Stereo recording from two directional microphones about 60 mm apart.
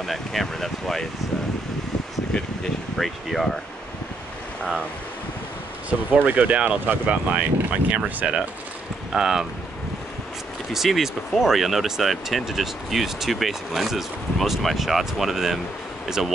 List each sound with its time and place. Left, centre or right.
0.0 s speech: centre
3.0 s speech: centre
5.9 s speech: right
10.7 s speech: centre